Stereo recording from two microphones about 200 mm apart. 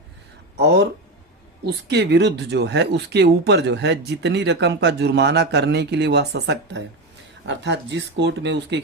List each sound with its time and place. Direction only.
0.5 s speech: 55° right (ahead or behind)